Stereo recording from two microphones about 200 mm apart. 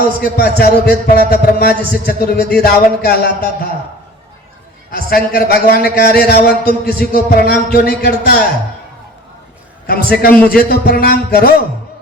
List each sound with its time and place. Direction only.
0.2 s a man's voice: 50° left (ahead or behind)
4.9 s a man's voice: 45° left (ahead or behind)
10.2 s a man's voice: 45° left (ahead or behind)